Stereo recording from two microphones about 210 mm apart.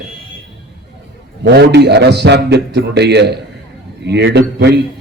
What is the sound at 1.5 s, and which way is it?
A man's voice, 50° right (ahead or behind).